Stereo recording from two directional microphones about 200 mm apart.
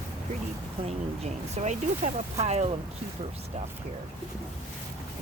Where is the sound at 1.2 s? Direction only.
35° right (ahead or behind).